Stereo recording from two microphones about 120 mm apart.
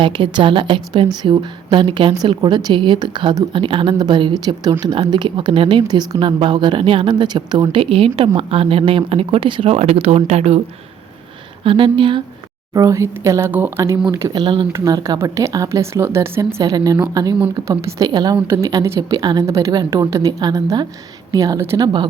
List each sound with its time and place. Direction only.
0.0 s a woman's voice: 45° right (ahead or behind)
9.7 s speech: 60° right (ahead or behind)
11.6 s speech: 45° right (ahead or behind)
12.7 s speech: 25° right (ahead or behind)
14.3 s speech: 45° right (ahead or behind)
14.7 s speech: 30° right (ahead or behind)
18.1 s a woman's voice: 35° right (ahead or behind)
18.4 s a woman's voice: 25° right (ahead or behind)